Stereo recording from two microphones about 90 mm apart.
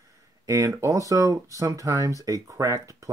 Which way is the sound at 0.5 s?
35° right (ahead or behind).